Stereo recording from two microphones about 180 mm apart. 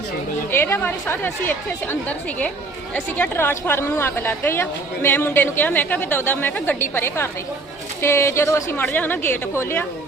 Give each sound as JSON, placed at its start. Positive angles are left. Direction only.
{"t": 0.5, "sound": "a woman's voice", "side_deg": 10}